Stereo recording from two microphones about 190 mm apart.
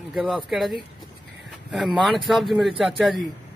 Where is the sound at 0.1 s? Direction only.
Centre (ahead or behind).